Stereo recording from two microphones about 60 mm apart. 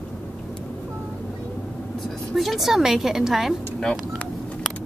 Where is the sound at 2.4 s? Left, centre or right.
Centre.